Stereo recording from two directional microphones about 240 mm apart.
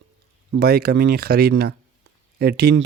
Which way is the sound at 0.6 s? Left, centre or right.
Right.